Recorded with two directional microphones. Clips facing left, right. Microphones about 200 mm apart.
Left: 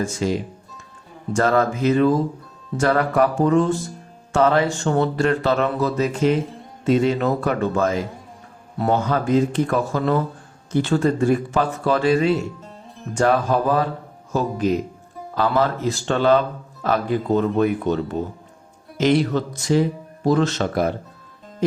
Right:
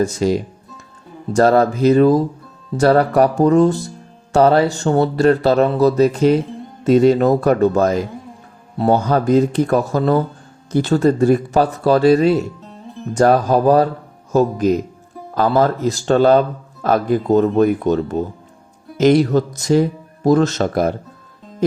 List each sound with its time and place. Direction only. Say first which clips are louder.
1.3 s speech: right 5 dB; 35° right (ahead or behind)